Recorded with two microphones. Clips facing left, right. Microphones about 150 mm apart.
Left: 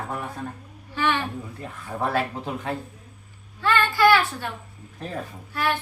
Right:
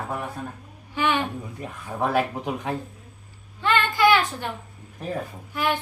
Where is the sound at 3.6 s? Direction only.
20° right (ahead or behind).